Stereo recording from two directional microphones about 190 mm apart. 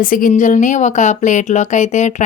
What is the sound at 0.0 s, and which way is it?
Speech, 45° left (ahead or behind).